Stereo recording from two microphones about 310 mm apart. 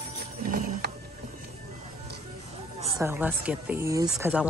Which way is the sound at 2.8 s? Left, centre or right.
Centre.